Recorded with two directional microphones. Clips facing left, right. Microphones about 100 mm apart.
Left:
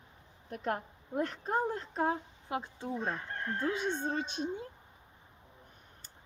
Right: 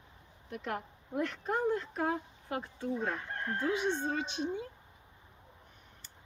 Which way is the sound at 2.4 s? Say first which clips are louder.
Even; 20° left (ahead or behind).